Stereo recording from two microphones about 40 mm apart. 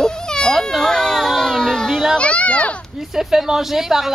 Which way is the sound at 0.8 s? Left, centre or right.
Centre.